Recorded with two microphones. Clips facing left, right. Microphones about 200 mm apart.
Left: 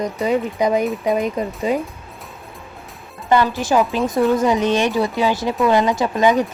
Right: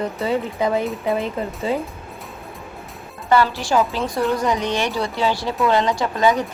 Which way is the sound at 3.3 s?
20° left (ahead or behind).